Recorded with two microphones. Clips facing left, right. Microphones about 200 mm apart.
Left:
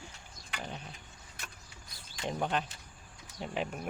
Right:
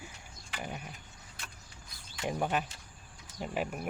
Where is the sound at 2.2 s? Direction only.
10° right (ahead or behind).